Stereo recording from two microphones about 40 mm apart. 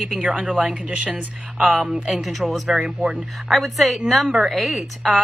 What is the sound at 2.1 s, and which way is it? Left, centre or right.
A woman's voice, centre.